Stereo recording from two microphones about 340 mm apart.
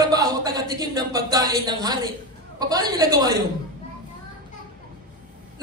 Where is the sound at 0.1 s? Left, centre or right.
Centre.